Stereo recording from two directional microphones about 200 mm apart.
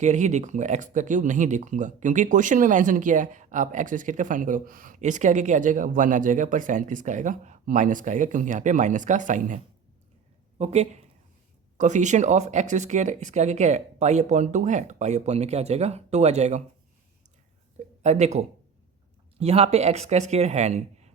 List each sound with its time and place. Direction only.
0.0 s speech: 35° right (ahead or behind)
10.6 s speech: 35° right (ahead or behind)
18.0 s speech: 35° right (ahead or behind)